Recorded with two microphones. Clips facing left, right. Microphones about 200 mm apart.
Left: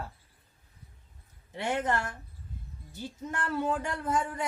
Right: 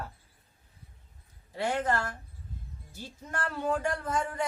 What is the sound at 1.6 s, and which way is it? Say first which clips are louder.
Speech: right 1 dB; 20° left (ahead or behind).